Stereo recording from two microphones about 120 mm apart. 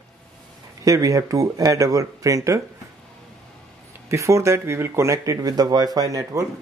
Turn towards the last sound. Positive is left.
turn(degrees=-30)  # may be behind; listen again after turning